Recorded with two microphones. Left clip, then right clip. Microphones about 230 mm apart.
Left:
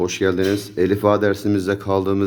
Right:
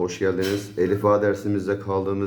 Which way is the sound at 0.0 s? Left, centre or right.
Left.